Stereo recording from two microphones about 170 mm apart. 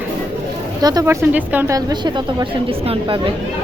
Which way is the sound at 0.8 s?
20° right (ahead or behind).